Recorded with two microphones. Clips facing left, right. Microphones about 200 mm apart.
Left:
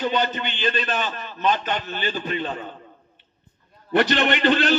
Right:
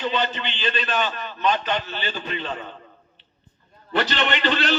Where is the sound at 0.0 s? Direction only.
45° left (ahead or behind).